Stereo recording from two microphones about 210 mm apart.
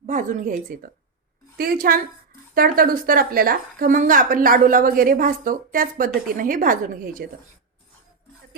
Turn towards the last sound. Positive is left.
turn(degrees=-40)  # may be behind; listen again after turning